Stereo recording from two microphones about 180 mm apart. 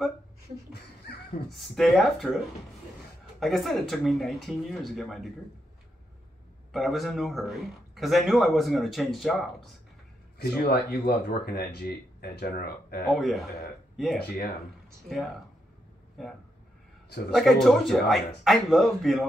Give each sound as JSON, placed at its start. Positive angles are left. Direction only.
{"t": 1.5, "sound": "a man's voice", "side_deg": 0}
{"t": 6.7, "sound": "a man's voice", "side_deg": 0}
{"t": 10.4, "sound": "speech", "side_deg": 65}
{"t": 13.1, "sound": "a man's voice", "side_deg": 0}
{"t": 16.2, "sound": "a man's voice", "side_deg": 0}